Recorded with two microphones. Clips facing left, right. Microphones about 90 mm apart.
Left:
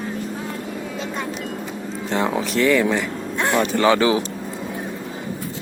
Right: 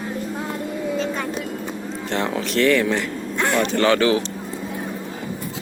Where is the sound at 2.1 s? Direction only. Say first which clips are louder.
Left 2 dB; 5° left (ahead or behind).